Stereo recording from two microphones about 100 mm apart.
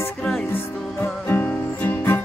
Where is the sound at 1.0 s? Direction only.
20° left (ahead or behind).